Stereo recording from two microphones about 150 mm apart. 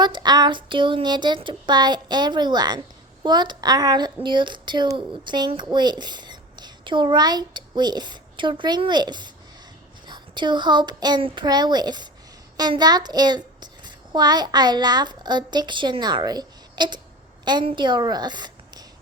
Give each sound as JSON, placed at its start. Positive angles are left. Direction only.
{"t": 0.0, "sound": "a child's voice", "side_deg": -30}